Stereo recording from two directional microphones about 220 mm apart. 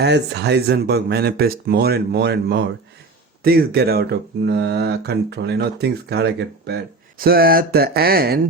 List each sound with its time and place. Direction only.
0.0 s speech: 50° right (ahead or behind)